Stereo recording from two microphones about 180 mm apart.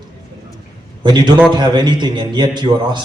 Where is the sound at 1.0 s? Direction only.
25° right (ahead or behind).